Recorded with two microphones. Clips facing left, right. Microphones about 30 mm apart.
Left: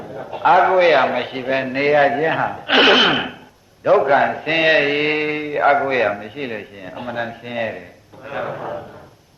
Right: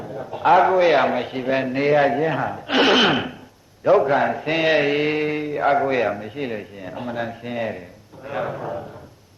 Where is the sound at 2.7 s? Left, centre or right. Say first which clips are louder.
Left 5 dB; left.